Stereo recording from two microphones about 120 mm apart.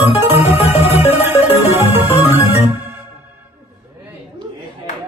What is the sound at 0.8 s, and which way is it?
Music, 20° right (ahead or behind).